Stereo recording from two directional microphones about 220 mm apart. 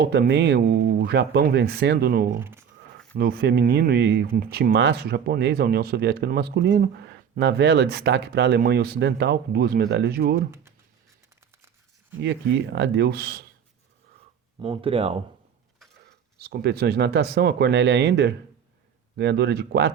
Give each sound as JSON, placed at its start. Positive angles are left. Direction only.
{"t": 0.0, "sound": "speech", "side_deg": -50}
{"t": 2.4, "sound": "speech", "side_deg": -10}
{"t": 3.2, "sound": "speech", "side_deg": -45}
{"t": 10.5, "sound": "speech", "side_deg": -10}
{"t": 12.2, "sound": "speech", "side_deg": -50}
{"t": 14.6, "sound": "speech", "side_deg": -25}
{"t": 16.4, "sound": "speech", "side_deg": -45}